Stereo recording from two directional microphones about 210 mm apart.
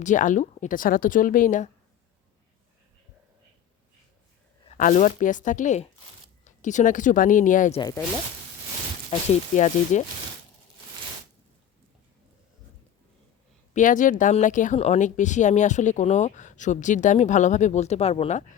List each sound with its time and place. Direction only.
0.0 s speech: 35° left (ahead or behind)
4.7 s speech: 35° left (ahead or behind)
7.8 s speech: 15° left (ahead or behind)
9.6 s speech: 35° left (ahead or behind)
13.7 s speech: 40° left (ahead or behind)